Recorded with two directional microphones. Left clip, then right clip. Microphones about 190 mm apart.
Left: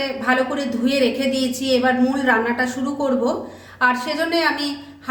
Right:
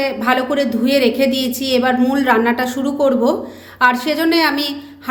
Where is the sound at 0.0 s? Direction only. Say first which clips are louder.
Right 3 dB; 45° right (ahead or behind).